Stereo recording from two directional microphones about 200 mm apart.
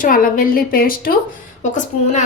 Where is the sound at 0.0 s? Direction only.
45° left (ahead or behind).